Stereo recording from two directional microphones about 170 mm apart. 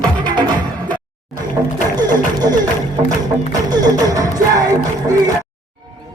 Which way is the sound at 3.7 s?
25° right (ahead or behind).